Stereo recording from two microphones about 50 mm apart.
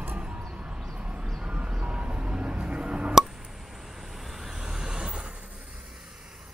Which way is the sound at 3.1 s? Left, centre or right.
Centre.